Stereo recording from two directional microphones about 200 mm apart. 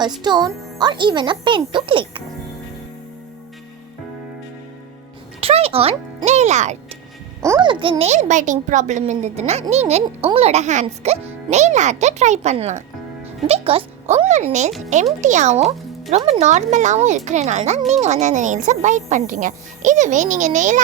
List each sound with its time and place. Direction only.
0.0 s speech: 20° right (ahead or behind)
5.4 s a child's voice: 30° right (ahead or behind)
7.4 s a child's voice: 15° right (ahead or behind)
7.7 s speech: 25° right (ahead or behind)